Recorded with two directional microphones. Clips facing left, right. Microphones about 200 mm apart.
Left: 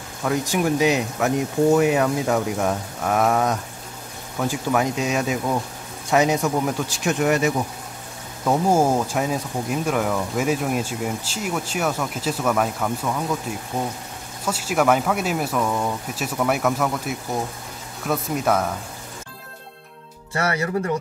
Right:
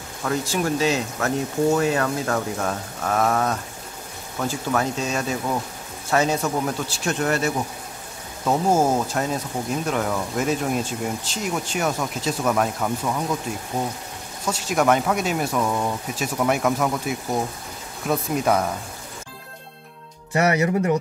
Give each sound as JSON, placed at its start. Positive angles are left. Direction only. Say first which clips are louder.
{"t": 0.2, "sound": "speech", "louder": "left 2 dB", "side_deg": 15}
{"t": 8.6, "sound": "speech", "louder": "left 1 dB", "side_deg": 10}
{"t": 14.4, "sound": "speech", "louder": "even", "side_deg": 5}
{"t": 20.3, "sound": "speech", "louder": "right 4 dB", "side_deg": -20}